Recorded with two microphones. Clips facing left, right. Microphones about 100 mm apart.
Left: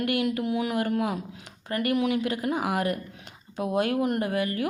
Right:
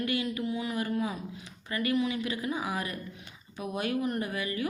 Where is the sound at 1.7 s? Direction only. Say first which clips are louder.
Left 4 dB; 60° left (ahead or behind).